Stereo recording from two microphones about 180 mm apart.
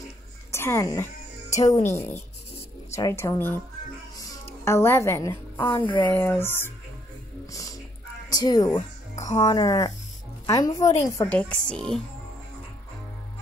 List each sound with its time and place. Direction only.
0.5 s a woman's voice: 15° left (ahead or behind)
4.2 s a sound: 15° left (ahead or behind)
5.8 s speech: 25° left (ahead or behind)
6.0 s a woman's voice: 10° left (ahead or behind)
8.3 s music: 20° left (ahead or behind)
9.4 s a woman's voice: 20° left (ahead or behind)
11.2 s a woman's voice: 5° left (ahead or behind)